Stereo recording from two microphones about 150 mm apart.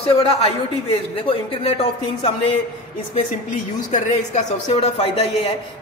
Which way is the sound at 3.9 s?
55° left (ahead or behind).